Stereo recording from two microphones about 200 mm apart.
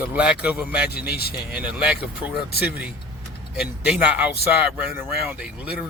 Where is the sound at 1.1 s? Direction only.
50° left (ahead or behind).